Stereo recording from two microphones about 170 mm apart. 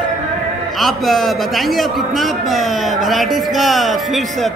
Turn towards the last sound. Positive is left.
turn(degrees=0)  # may be behind; listen again after turning